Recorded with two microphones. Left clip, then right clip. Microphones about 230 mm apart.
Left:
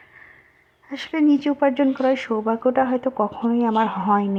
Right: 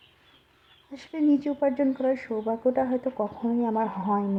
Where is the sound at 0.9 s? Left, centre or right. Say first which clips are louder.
Left 5 dB; centre.